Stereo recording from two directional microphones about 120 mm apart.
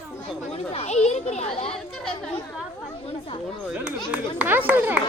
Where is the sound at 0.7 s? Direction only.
70° left (ahead or behind).